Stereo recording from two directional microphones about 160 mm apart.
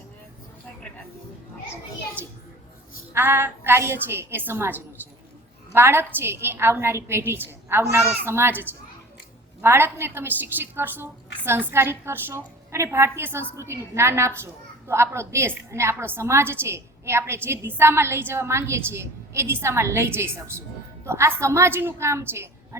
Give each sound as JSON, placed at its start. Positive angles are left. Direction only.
{"t": 3.1, "sound": "a woman's voice", "side_deg": -15}